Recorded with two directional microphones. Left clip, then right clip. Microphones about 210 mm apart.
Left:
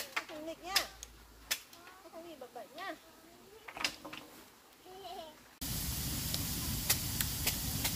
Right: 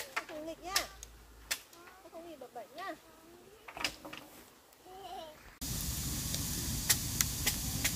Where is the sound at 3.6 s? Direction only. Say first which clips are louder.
Even; centre (ahead or behind).